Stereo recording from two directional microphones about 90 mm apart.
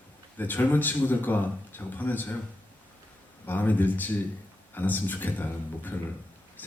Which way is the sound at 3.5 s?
20° left (ahead or behind).